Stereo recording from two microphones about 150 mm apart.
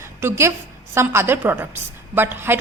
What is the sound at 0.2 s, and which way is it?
A woman's voice, 15° right (ahead or behind).